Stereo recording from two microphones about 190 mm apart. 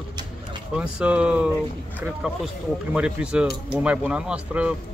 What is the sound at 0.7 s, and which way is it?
Speech, 5° right (ahead or behind).